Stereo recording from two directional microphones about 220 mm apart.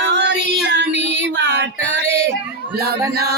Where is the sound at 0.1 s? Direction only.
50° right (ahead or behind).